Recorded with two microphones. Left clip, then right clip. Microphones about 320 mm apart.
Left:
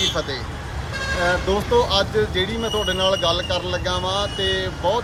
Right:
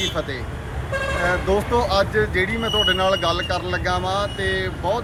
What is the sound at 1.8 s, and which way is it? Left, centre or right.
Speech, centre.